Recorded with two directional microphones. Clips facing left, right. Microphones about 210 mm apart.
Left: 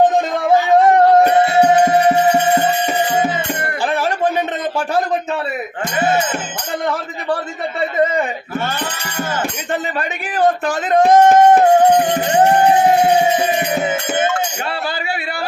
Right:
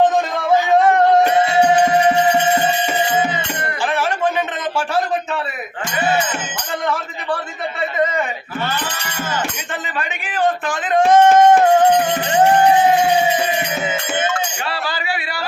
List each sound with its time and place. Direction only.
1.6 s music: 45° left (ahead or behind)
10.2 s speech: 40° left (ahead or behind)